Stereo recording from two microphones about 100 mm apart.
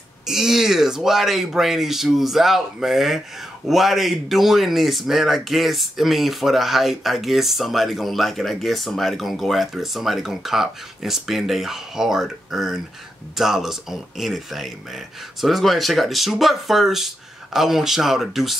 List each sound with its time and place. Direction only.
0.3 s speech: 5° right (ahead or behind)